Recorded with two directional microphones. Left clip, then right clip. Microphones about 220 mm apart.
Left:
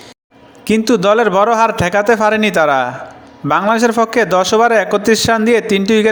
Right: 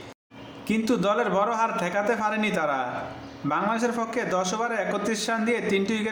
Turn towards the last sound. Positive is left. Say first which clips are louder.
# left 13 dB
turn(degrees=40)  # may be behind; listen again after turning